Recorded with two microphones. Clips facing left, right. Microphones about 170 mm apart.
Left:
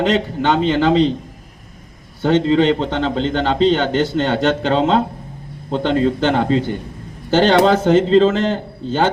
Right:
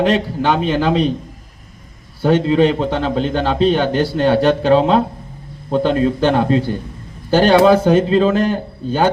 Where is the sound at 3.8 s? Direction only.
20° left (ahead or behind).